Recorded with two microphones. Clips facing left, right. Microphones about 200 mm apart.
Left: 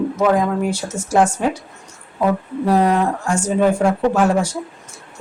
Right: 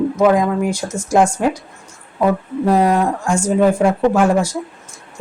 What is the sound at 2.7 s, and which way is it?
Speech, 10° right (ahead or behind).